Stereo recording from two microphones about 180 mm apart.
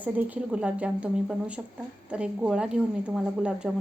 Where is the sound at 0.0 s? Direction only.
10° right (ahead or behind).